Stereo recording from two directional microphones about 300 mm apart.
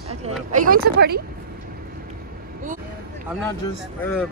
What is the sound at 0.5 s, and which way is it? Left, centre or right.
Speech, right.